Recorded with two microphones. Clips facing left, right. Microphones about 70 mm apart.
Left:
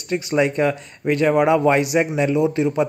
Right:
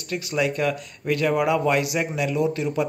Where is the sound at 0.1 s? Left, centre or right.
Left.